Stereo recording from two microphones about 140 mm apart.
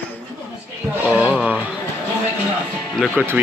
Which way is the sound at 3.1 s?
15° right (ahead or behind).